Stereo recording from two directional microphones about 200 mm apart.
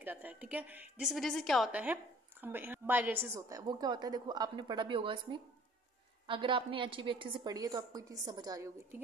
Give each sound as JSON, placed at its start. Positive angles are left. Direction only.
{"t": 0.0, "sound": "a woman's voice", "side_deg": -10}